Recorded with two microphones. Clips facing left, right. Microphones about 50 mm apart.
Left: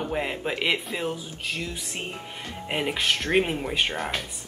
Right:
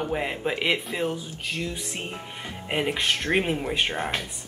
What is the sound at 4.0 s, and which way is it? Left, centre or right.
Speech, right.